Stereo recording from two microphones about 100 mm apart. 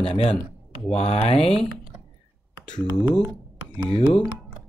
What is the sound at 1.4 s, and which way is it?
Speech, 5° left (ahead or behind).